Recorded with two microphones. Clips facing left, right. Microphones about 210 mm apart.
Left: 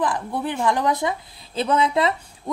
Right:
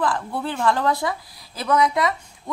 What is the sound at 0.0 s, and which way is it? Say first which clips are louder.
A woman's voice: even; 15° left (ahead or behind).